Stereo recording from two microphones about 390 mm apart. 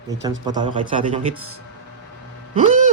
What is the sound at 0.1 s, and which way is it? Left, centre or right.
Speech, centre.